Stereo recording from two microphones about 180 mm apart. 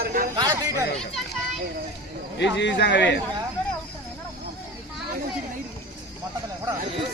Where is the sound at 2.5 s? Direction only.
75° left (ahead or behind).